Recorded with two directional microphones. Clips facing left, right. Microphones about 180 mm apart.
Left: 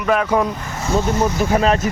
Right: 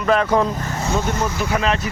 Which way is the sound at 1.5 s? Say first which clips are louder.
Left 4 dB; 40° left (ahead or behind).